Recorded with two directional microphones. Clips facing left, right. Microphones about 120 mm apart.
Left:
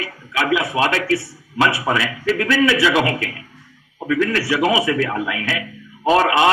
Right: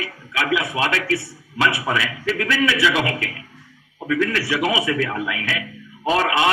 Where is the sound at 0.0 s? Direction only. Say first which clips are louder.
Left 3 dB; 35° left (ahead or behind).